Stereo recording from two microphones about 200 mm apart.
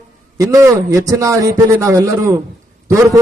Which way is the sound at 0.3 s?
15° right (ahead or behind).